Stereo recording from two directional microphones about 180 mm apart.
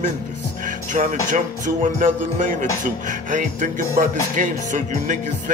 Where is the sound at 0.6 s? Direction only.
45° right (ahead or behind).